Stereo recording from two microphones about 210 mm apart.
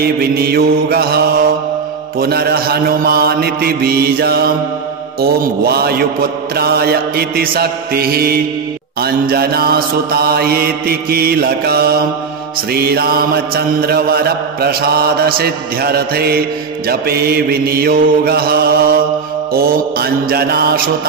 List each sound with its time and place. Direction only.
0.0 s mantra: 45° right (ahead or behind)